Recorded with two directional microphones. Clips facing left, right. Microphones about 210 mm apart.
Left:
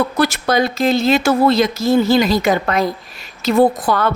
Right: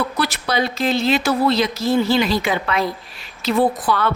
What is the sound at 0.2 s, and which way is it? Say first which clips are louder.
A woman's voice: left 6 dB; 45° left (ahead or behind).